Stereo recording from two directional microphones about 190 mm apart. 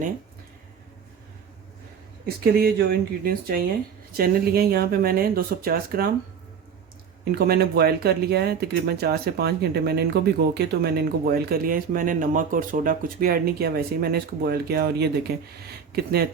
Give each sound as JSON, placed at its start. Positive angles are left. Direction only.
{"t": 2.2, "sound": "speech", "side_deg": -55}
{"t": 7.3, "sound": "speech", "side_deg": -55}